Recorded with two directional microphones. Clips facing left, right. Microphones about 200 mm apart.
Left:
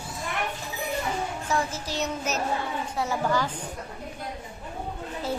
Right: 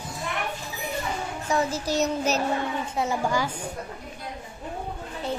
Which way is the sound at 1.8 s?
40° right (ahead or behind).